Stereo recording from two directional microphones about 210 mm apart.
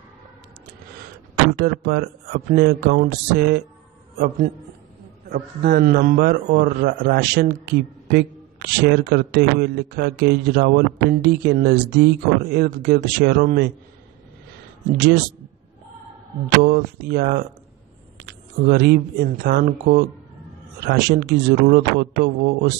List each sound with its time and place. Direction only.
1.6 s a man's voice: 45° right (ahead or behind)
5.3 s a man's voice: 45° right (ahead or behind)
16.4 s a man's voice: 45° right (ahead or behind)